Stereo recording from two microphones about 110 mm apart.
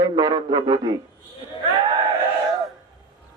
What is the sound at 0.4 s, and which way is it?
Speech, 45° right (ahead or behind).